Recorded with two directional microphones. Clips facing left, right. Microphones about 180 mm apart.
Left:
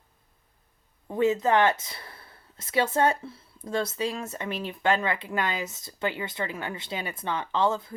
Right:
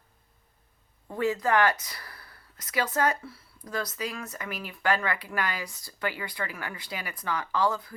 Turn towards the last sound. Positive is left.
turn(degrees=25)  # may be behind; listen again after turning